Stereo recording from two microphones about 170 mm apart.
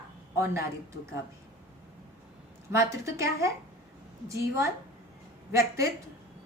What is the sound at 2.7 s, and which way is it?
A woman's voice, 15° right (ahead or behind).